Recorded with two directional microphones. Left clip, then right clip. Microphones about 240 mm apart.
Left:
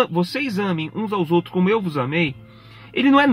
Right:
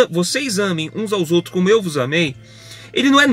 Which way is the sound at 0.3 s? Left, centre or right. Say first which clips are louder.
Right 4 dB; centre.